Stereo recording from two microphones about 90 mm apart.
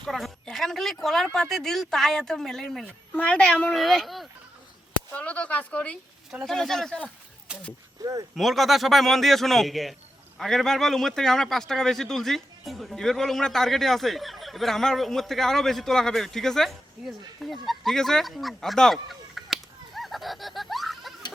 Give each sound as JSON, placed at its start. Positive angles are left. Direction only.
{"t": 0.0, "sound": "a woman's voice", "side_deg": 5}
{"t": 5.1, "sound": "a woman's voice", "side_deg": 15}
{"t": 6.4, "sound": "speech", "side_deg": 5}
{"t": 8.0, "sound": "speech", "side_deg": -45}
{"t": 8.4, "sound": "speech", "side_deg": 0}